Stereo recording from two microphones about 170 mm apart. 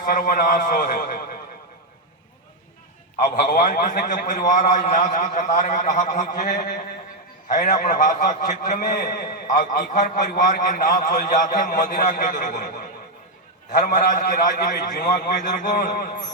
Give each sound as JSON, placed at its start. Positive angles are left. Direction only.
{"t": 0.0, "sound": "a man's voice", "side_deg": 55}
{"t": 3.2, "sound": "a man's voice", "side_deg": 65}
{"t": 13.7, "sound": "a man's voice", "side_deg": 50}